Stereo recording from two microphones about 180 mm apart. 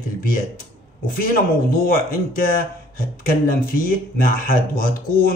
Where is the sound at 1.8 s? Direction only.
50° left (ahead or behind).